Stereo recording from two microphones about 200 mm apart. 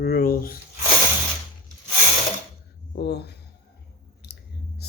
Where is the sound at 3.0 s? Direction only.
55° left (ahead or behind).